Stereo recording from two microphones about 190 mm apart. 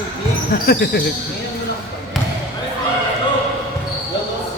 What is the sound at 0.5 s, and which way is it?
Speech, 50° left (ahead or behind).